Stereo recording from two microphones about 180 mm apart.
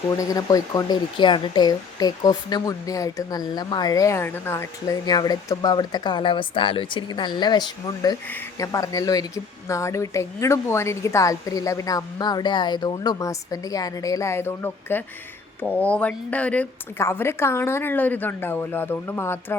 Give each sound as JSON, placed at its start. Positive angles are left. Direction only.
{"t": 0.2, "sound": "speech", "side_deg": 20}